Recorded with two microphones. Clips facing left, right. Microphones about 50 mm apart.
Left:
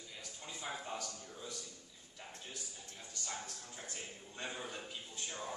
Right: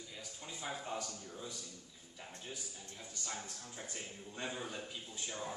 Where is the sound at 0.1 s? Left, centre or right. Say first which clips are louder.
Left 2 dB; centre.